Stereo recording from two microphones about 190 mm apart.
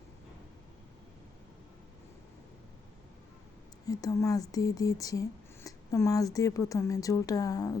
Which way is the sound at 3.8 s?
15° left (ahead or behind).